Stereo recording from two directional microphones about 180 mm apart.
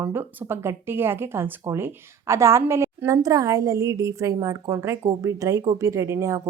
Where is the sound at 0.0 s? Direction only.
10° right (ahead or behind).